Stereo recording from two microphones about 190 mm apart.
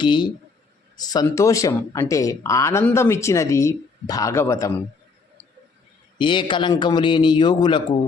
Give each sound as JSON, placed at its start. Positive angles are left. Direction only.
{"t": 0.0, "sound": "a man's voice", "side_deg": 25}
{"t": 6.1, "sound": "a man's voice", "side_deg": 25}